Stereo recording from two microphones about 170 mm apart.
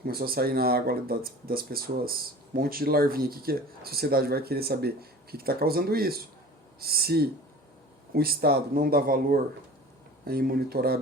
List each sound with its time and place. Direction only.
0.0 s speech: 65° right (ahead or behind)